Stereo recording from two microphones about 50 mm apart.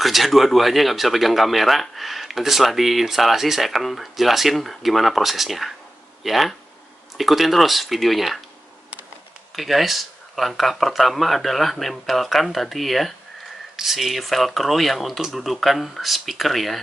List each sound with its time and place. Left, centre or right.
0.0 s speech: centre
9.6 s speech: centre